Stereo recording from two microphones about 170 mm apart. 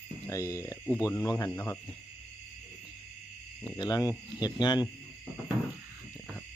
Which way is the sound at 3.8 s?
20° left (ahead or behind).